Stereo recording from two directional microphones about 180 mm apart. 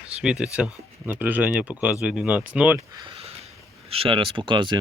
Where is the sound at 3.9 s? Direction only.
30° right (ahead or behind).